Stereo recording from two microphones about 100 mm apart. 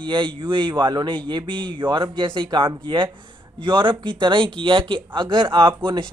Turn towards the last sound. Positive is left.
turn(degrees=-55)  # may be behind; listen again after turning